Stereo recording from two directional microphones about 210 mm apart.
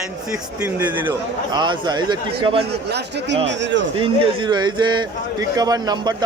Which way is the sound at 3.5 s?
60° right (ahead or behind).